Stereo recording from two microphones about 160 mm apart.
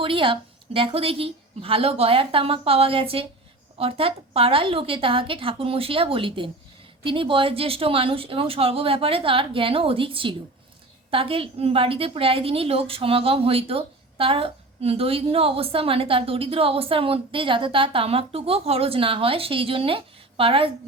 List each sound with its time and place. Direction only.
0.0 s a woman's voice: 35° right (ahead or behind)